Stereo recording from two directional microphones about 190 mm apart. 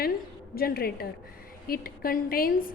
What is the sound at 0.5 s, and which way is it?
A woman's voice, 55° left (ahead or behind).